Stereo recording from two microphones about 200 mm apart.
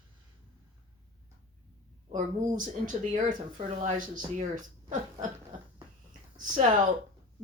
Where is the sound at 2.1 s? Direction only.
40° right (ahead or behind).